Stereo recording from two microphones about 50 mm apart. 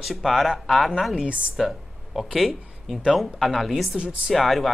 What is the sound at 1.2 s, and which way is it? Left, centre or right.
Speech, right.